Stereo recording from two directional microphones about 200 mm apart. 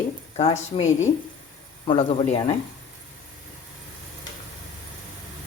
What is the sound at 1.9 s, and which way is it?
Speech, 25° left (ahead or behind).